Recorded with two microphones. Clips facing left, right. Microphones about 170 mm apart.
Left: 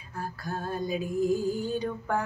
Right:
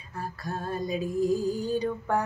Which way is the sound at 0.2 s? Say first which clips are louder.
Even; centre (ahead or behind).